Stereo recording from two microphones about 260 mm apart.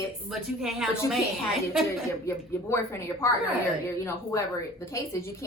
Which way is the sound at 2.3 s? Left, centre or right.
Centre.